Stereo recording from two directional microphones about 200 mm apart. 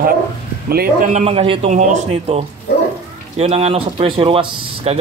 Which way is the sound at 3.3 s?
30° right (ahead or behind).